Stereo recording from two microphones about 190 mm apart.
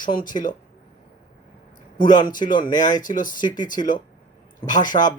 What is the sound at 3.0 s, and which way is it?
Speech, 45° left (ahead or behind).